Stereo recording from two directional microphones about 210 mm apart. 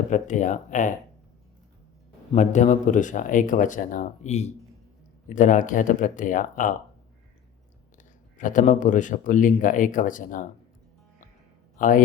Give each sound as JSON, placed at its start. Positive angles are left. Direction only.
{"t": 0.1, "sound": "speech", "side_deg": 35}
{"t": 2.3, "sound": "speech", "side_deg": 35}
{"t": 8.4, "sound": "speech", "side_deg": 40}
{"t": 11.8, "sound": "speech", "side_deg": 40}